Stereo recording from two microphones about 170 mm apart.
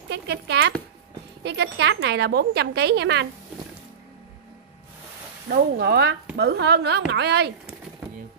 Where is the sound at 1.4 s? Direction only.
90° right.